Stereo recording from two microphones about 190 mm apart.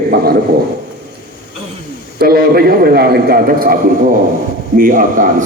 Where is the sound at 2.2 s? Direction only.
55° right (ahead or behind).